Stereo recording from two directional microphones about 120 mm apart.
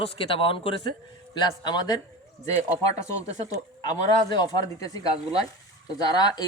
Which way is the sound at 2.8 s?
60° right (ahead or behind).